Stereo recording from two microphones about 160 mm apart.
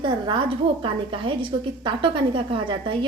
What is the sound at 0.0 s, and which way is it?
A woman's voice, 30° right (ahead or behind).